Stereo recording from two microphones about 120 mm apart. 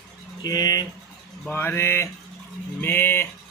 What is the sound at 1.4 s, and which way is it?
Speech, 20° left (ahead or behind).